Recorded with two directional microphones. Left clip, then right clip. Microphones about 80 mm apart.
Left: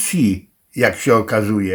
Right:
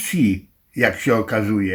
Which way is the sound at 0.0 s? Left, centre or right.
Left.